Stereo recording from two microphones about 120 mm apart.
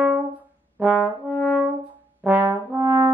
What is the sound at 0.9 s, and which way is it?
Brass instrument, 20° left (ahead or behind).